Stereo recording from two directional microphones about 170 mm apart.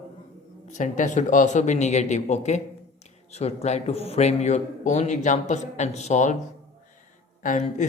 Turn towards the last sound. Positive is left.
turn(degrees=50)  # may be behind; listen again after turning